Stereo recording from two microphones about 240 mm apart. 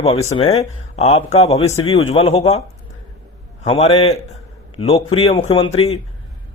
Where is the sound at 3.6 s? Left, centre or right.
Left.